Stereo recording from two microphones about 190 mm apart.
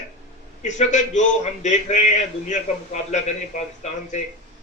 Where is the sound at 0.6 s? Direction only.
40° left (ahead or behind).